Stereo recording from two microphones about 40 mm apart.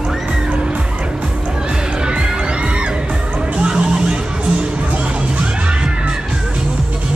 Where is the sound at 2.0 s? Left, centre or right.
Right.